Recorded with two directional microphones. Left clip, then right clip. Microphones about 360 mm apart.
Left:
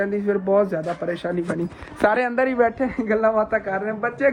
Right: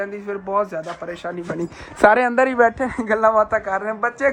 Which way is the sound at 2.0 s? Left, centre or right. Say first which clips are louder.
Right 5 dB; right.